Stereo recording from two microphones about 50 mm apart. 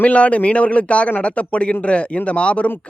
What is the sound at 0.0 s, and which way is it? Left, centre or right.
A man's voice, left.